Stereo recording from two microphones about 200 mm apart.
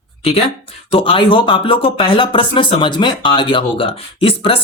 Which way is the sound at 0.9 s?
25° left (ahead or behind).